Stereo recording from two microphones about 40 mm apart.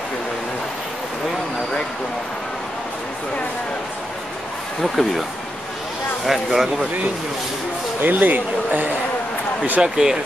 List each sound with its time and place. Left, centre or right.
4.8 s speech: centre
6.2 s speech: centre
8.0 s speech: right
9.8 s speech: centre